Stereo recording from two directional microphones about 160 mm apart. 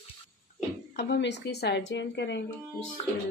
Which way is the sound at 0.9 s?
90° left.